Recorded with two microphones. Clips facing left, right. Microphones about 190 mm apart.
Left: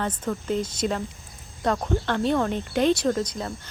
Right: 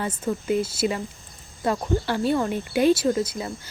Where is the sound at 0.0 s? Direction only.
10° right (ahead or behind).